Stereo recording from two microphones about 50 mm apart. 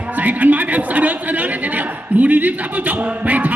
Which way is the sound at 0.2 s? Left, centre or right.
Right.